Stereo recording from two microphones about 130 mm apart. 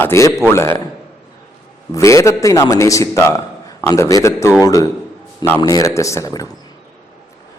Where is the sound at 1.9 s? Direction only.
25° left (ahead or behind).